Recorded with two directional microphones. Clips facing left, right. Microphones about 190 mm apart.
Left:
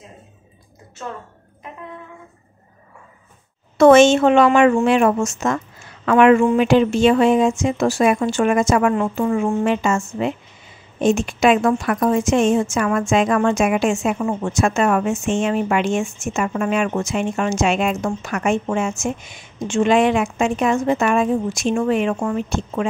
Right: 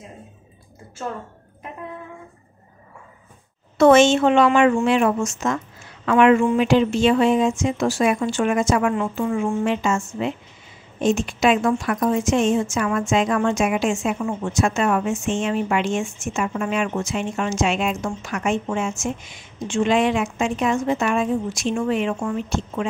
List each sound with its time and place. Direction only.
3.7 s speech: 50° left (ahead or behind)
8.6 s speech: 50° left (ahead or behind)
11.0 s a woman's voice: 55° left (ahead or behind)